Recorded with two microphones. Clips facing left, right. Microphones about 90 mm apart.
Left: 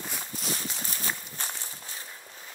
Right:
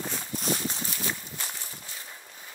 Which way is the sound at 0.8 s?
40° left (ahead or behind).